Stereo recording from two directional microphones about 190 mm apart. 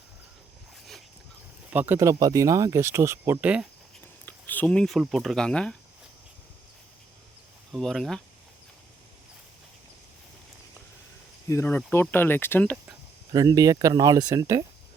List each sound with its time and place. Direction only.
1.7 s speech: 10° right (ahead or behind)
4.0 s speech: 10° left (ahead or behind)
7.7 s speech: centre (ahead or behind)
11.4 s speech: 15° left (ahead or behind)
13.3 s speech: 20° right (ahead or behind)